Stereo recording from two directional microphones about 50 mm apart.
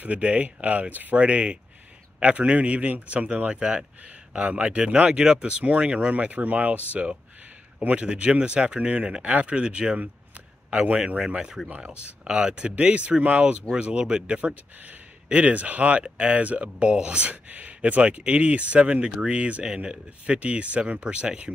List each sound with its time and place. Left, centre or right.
0.0 s speech: right